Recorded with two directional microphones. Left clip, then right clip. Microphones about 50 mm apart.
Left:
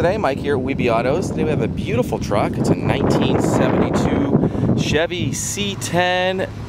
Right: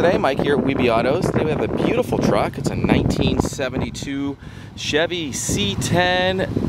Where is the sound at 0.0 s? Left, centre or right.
Centre.